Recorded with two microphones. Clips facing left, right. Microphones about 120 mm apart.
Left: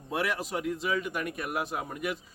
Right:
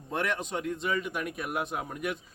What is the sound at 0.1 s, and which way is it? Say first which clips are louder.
Speech: even; 5° left (ahead or behind).